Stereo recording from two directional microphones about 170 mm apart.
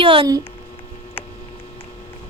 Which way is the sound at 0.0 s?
30° right (ahead or behind).